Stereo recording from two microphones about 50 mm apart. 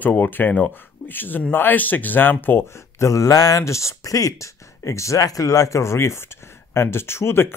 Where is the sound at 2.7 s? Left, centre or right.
Left.